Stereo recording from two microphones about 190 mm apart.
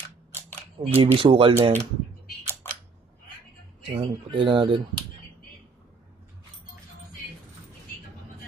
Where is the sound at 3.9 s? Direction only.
25° right (ahead or behind).